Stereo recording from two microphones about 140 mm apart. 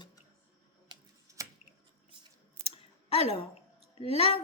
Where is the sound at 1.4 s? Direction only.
20° right (ahead or behind).